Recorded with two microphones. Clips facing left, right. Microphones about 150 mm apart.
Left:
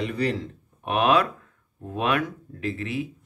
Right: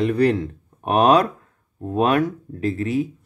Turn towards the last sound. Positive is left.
turn(degrees=-40)  # may be behind; listen again after turning